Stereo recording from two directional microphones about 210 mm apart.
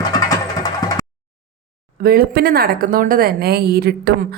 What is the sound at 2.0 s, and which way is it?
A woman's voice, 45° right (ahead or behind).